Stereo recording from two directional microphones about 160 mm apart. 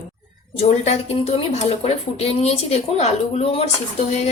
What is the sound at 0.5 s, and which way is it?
Speech, 40° left (ahead or behind).